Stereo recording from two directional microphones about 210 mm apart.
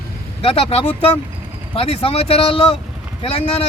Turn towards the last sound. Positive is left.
turn(degrees=30)  # may be behind; listen again after turning